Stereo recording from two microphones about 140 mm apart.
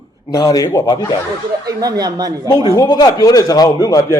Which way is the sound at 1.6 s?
25° right (ahead or behind).